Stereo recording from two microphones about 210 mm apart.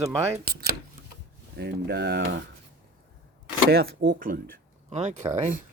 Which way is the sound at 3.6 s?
55° right (ahead or behind).